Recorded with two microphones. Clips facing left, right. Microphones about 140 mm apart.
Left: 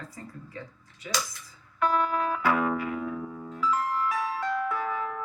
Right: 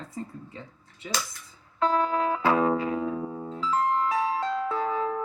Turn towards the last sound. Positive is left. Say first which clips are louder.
# right 4 dB
turn(degrees=-30)  # may be behind; listen again after turning